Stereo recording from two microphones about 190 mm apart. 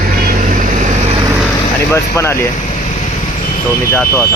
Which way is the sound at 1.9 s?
15° left (ahead or behind).